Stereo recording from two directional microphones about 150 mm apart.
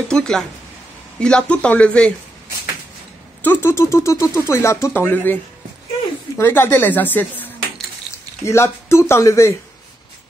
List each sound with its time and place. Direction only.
0.1 s speech: 5° left (ahead or behind)
3.4 s speech: 15° left (ahead or behind)